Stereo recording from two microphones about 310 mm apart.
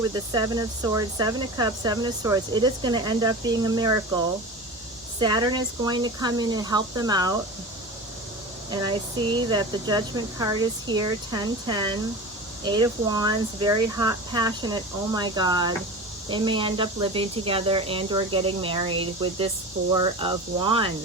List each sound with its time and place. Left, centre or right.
0.0 s speech: centre
5.2 s speech: centre
8.7 s speech: centre